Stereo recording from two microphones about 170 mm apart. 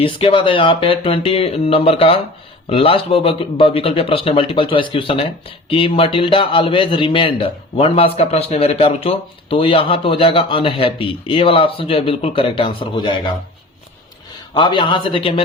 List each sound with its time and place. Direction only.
0.0 s a man's voice: 30° left (ahead or behind)
14.5 s speech: 25° left (ahead or behind)